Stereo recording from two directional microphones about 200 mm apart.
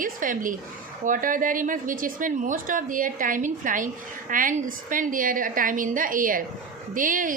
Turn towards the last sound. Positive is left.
turn(degrees=-40)  # may be behind; listen again after turning